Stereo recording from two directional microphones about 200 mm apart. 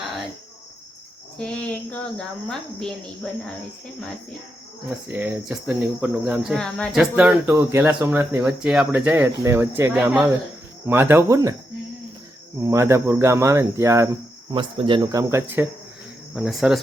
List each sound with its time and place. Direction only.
1.4 s speech: 5° left (ahead or behind)
5.0 s speech: 10° right (ahead or behind)
12.6 s speech: 15° right (ahead or behind)
14.5 s speech: 25° right (ahead or behind)
16.3 s speech: centre (ahead or behind)